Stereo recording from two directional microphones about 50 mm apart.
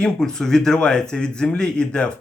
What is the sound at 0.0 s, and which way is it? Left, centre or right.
Speech, centre.